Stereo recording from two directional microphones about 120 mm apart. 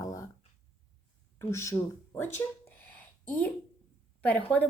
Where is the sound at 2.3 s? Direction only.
15° left (ahead or behind).